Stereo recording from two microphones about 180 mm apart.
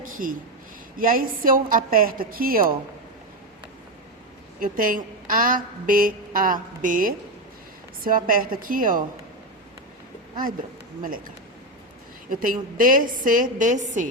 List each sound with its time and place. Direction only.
0.0 s a sound: 50° right (ahead or behind)
0.9 s a woman's voice: 50° right (ahead or behind)
4.6 s a woman's voice: 50° right (ahead or behind)
12.3 s a woman's voice: 50° right (ahead or behind)